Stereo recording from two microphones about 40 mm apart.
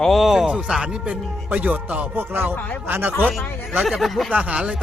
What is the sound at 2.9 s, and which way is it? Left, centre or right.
Speech, right.